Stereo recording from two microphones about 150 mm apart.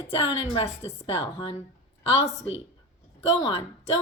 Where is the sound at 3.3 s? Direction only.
40° left (ahead or behind).